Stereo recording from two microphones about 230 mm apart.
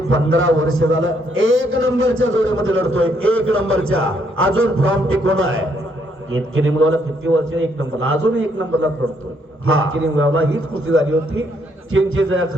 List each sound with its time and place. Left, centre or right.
0.1 s a man's voice: right